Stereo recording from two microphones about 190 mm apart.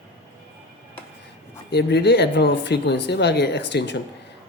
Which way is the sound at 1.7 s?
60° left (ahead or behind).